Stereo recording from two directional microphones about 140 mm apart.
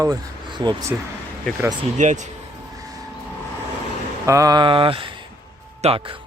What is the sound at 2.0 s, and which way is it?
Speech, 60° right (ahead or behind).